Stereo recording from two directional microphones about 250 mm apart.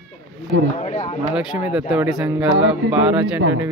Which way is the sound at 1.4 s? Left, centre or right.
Centre.